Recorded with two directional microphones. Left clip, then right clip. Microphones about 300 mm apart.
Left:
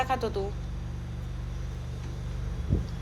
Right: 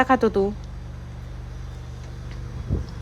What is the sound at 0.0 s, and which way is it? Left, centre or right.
Speech, right.